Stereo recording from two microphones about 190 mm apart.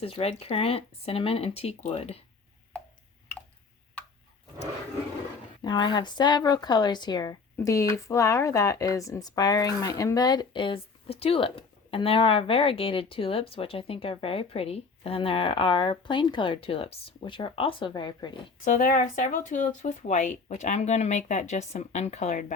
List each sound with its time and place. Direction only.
0.0 s speech: 30° left (ahead or behind)
5.6 s a woman's voice: 25° left (ahead or behind)
18.6 s speech: 45° left (ahead or behind)